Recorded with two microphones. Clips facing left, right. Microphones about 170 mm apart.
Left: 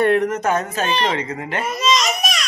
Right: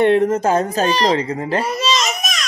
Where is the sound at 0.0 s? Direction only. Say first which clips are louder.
Right 3 dB; 25° right (ahead or behind).